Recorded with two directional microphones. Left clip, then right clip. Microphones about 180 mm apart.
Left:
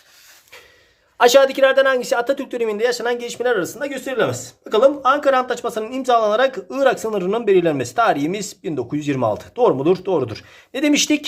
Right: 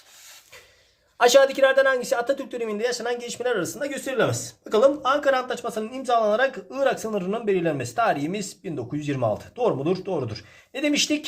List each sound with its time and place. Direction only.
1.2 s speech: 25° left (ahead or behind)